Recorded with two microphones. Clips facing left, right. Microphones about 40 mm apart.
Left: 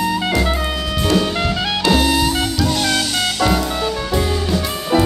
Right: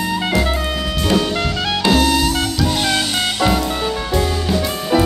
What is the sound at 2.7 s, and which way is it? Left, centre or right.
Music, centre.